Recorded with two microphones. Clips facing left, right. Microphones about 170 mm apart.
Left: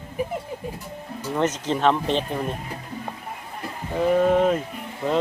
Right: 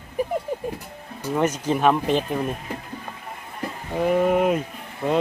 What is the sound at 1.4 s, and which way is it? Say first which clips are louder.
Speech: right 1 dB; 10° right (ahead or behind).